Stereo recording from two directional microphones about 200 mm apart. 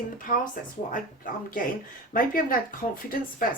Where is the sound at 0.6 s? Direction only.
45° left (ahead or behind).